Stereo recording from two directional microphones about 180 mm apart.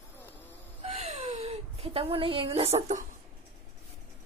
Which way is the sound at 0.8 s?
35° right (ahead or behind).